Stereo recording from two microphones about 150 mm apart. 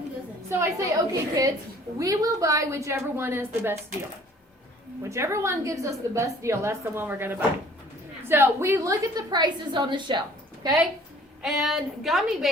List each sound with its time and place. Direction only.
0.6 s a woman's voice: 25° right (ahead or behind)
5.0 s a woman's voice: 20° right (ahead or behind)
11.4 s a woman's voice: centre (ahead or behind)